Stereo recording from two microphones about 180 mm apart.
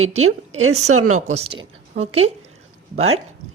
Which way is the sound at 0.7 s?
40° right (ahead or behind).